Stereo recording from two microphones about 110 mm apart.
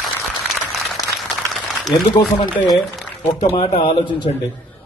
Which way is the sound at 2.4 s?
35° left (ahead or behind).